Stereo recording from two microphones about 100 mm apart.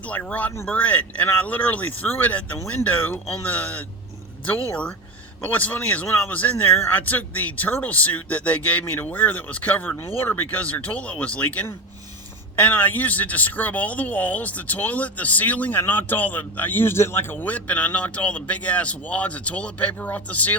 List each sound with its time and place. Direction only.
0.0 s speech: 15° left (ahead or behind)